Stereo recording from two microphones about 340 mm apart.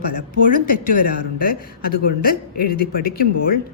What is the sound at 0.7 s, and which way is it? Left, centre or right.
A woman's voice, left.